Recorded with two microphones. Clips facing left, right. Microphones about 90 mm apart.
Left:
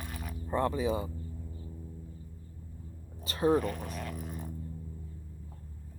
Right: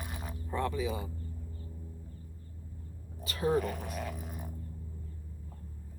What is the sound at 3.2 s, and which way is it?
Speech, 35° left (ahead or behind).